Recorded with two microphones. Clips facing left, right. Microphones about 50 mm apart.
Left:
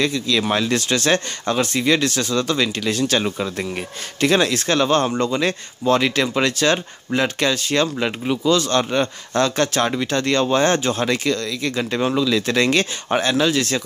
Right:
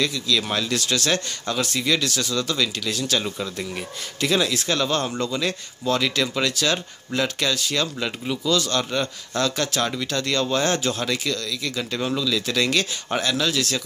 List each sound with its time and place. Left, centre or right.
0.0 s speech: left